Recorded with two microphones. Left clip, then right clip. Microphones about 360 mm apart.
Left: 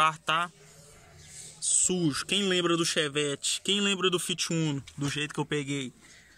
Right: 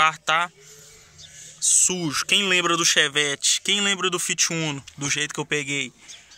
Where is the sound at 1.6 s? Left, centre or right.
Centre.